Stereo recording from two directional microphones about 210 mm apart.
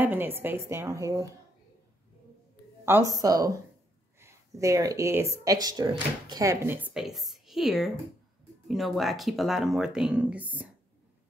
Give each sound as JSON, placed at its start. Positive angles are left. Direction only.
{"t": 0.0, "sound": "speech", "side_deg": -10}
{"t": 2.8, "sound": "speech", "side_deg": -15}